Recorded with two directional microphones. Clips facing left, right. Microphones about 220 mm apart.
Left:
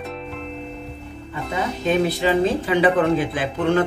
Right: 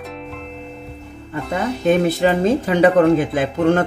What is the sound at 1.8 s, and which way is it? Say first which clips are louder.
Speech: right 4 dB; 50° right (ahead or behind).